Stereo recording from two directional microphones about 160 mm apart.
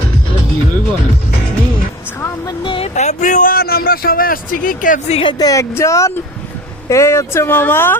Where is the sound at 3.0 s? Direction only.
50° left (ahead or behind).